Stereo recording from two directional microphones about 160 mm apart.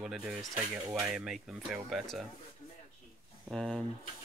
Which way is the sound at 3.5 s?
5° left (ahead or behind).